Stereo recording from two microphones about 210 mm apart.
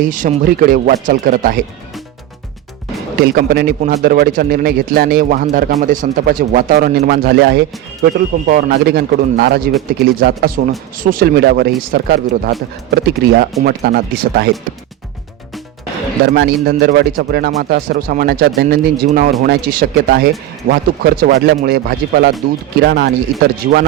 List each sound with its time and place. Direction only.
0.0 s a man's voice: 40° right (ahead or behind)
3.2 s a man's voice: 50° right (ahead or behind)
16.2 s a man's voice: 55° right (ahead or behind)